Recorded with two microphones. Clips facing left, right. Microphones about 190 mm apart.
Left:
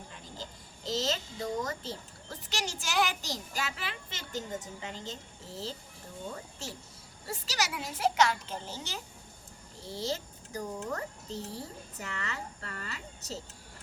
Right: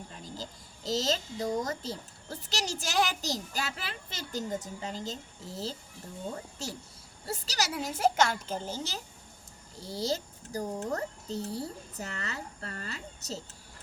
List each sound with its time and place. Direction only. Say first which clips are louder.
0.9 s a child's voice: right 2 dB; 40° right (ahead or behind)
6.3 s a child's voice: right 3 dB; 40° right (ahead or behind)